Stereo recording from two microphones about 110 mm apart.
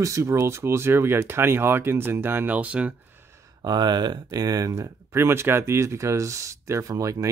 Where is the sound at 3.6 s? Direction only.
40° right (ahead or behind).